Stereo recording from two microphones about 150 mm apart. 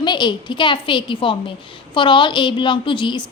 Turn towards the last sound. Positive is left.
turn(degrees=35)  # may be behind; listen again after turning